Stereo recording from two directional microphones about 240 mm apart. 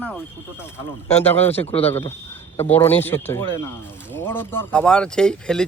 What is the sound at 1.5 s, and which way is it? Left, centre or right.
Speech, left.